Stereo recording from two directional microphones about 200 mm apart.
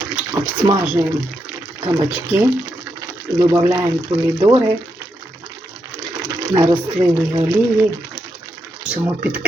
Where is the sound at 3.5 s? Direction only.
15° right (ahead or behind).